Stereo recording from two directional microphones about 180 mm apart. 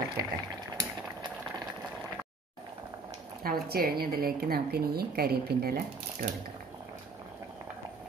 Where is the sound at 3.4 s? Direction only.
60° right (ahead or behind).